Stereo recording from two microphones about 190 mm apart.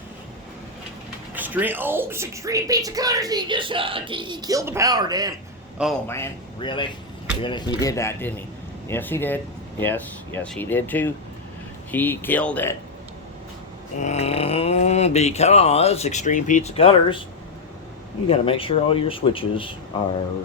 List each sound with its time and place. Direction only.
1.4 s speech: 10° right (ahead or behind)
5.7 s a man's voice: centre (ahead or behind)
6.1 s speech: 15° left (ahead or behind)
6.6 s speech: 25° left (ahead or behind); by 12.7 s 10° left (ahead or behind)
14.0 s speech: 35° left (ahead or behind)
18.3 s speech: 30° left (ahead or behind)